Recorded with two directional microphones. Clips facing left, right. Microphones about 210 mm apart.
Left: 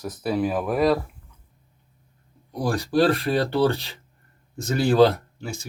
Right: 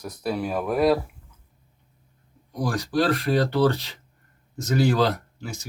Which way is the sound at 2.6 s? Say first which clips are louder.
Left 3 dB; 30° left (ahead or behind).